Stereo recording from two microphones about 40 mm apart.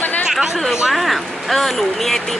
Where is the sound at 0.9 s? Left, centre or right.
Centre.